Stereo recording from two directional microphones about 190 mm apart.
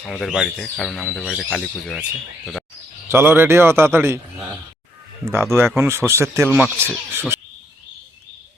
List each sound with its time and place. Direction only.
0.0 s speech: 5° left (ahead or behind)
3.1 s a man's voice: 10° right (ahead or behind)